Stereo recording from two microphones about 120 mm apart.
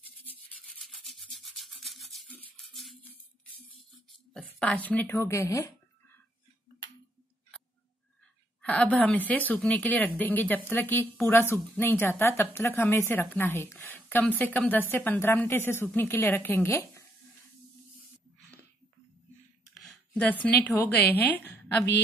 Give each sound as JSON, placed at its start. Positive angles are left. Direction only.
{"t": 0.7, "sound": "rub", "side_deg": 0}
{"t": 2.6, "sound": "a sound", "side_deg": 0}
{"t": 3.0, "sound": "music", "side_deg": 15}
{"t": 4.3, "sound": "speech", "side_deg": 5}
{"t": 8.6, "sound": "speech", "side_deg": 10}
{"t": 13.7, "sound": "a sound", "side_deg": 15}
{"t": 14.4, "sound": "speech", "side_deg": 15}
{"t": 20.2, "sound": "speech", "side_deg": 15}